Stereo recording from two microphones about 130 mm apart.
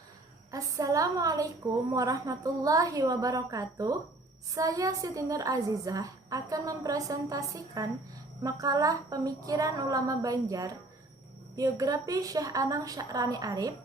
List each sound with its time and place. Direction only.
0.5 s a woman's voice: 25° right (ahead or behind)